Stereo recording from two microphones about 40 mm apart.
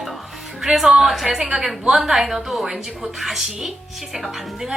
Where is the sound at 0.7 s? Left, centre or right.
Centre.